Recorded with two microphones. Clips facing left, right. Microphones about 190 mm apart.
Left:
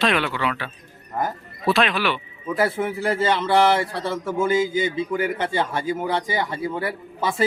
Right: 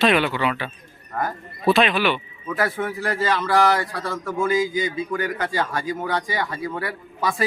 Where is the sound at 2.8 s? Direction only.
30° left (ahead or behind).